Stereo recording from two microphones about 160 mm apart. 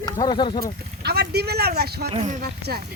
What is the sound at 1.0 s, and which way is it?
Speech, 90° right.